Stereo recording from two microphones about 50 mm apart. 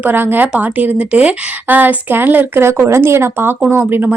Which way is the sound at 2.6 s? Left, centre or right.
Right.